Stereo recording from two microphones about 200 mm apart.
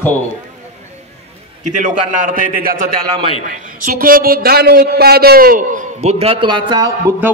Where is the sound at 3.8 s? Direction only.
45° right (ahead or behind); by 6.9 s 20° right (ahead or behind).